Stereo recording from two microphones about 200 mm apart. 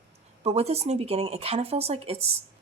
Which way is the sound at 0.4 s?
30° right (ahead or behind).